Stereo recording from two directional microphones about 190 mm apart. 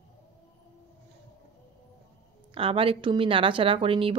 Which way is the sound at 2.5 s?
30° right (ahead or behind).